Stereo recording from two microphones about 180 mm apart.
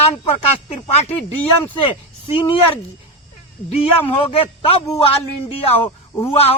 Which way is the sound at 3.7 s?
30° left (ahead or behind).